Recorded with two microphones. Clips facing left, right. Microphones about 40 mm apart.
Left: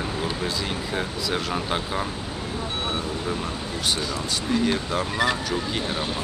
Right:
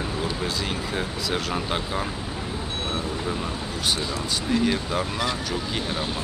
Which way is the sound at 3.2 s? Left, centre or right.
Centre.